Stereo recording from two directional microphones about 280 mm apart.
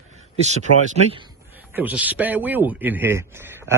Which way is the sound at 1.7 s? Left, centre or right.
Centre.